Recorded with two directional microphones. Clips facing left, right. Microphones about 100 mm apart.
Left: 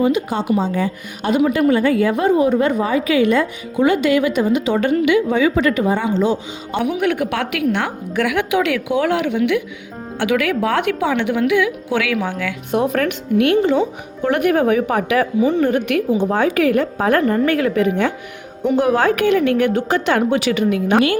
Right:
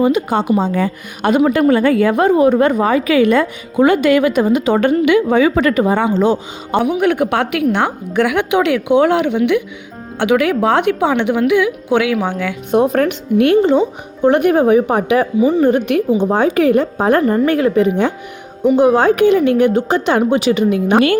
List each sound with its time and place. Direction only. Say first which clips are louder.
0.0 s a woman's voice: right 3 dB; 55° right (ahead or behind)
7.0 s a woman's voice: right 4 dB; 35° right (ahead or behind)